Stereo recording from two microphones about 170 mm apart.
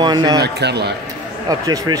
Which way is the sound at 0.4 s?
75° right (ahead or behind).